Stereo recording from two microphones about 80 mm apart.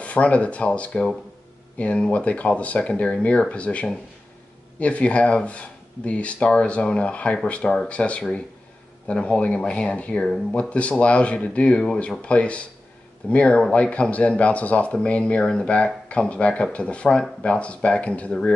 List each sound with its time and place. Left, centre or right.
0.0 s speech: centre